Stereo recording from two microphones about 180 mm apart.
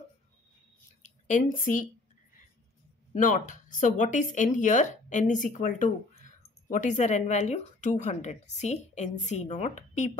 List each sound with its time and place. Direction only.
1.0 s a woman's voice: 45° left (ahead or behind)
3.2 s speech: 45° left (ahead or behind)